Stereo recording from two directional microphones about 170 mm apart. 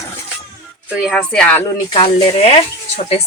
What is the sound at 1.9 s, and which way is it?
Speech, 35° left (ahead or behind).